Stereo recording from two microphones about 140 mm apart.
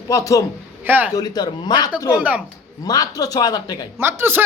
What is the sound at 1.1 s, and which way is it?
A man's voice, 30° left (ahead or behind).